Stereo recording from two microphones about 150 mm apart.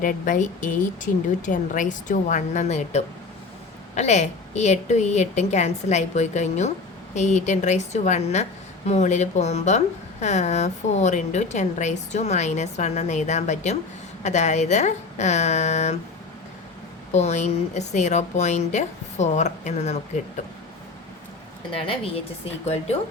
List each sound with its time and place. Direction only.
0.0 s a woman's voice: 60° left (ahead or behind)
17.1 s speech: 50° left (ahead or behind)
21.8 s a woman's voice: 40° left (ahead or behind)